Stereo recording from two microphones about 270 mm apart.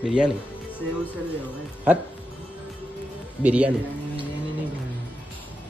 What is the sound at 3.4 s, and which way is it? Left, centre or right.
Speech, centre.